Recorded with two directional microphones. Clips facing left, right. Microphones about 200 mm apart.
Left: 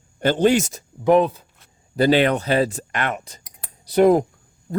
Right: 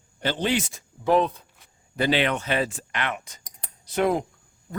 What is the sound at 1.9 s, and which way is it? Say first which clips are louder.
Speech: left 7 dB; 40° left (ahead or behind).